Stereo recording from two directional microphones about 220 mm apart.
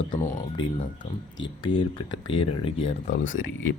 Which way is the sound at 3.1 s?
60° left (ahead or behind).